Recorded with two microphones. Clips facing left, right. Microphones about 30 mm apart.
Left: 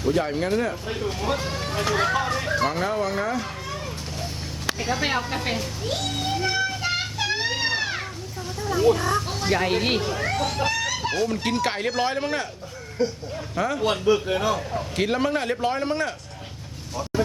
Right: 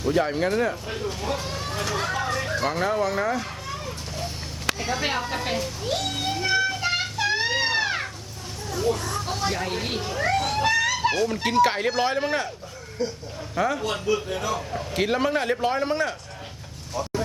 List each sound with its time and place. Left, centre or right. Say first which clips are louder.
0.0 s speech: right 1 dB; centre
4.8 s a sound: left 3 dB; centre
8.7 s a child's voice: left 6 dB; centre
9.2 s a man's voice: right 2 dB; centre
9.5 s speech: left 6 dB; centre
10.0 s a man's voice: right 1 dB; centre
13.0 s a child's voice: left 4 dB; centre
13.6 s a man's voice: right 1 dB; centre
14.0 s speech: left 4 dB; left
14.9 s a man's voice: right 1 dB; centre
16.9 s a sound: right 1 dB; centre